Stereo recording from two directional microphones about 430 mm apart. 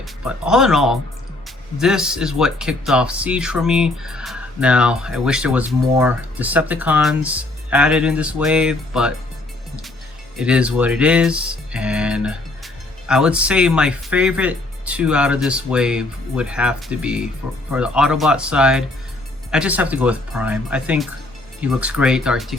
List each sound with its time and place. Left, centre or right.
0.0 s speech: centre
10.3 s speech: centre